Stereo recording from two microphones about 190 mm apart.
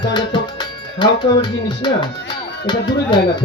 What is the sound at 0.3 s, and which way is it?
Speech, 25° left (ahead or behind).